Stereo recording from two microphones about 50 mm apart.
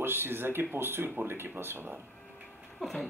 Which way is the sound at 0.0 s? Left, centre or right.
Right.